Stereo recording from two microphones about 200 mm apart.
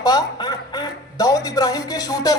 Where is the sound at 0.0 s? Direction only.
20° left (ahead or behind).